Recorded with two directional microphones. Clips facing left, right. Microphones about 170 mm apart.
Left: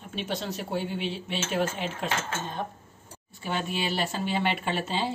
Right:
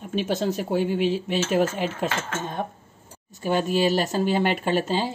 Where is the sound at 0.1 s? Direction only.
45° right (ahead or behind).